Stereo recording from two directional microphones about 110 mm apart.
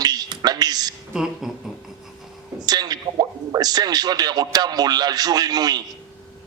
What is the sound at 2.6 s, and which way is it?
Speech, 35° right (ahead or behind).